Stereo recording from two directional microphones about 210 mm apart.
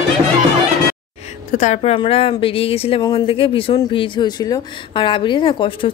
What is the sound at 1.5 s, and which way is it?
Speech, 35° left (ahead or behind).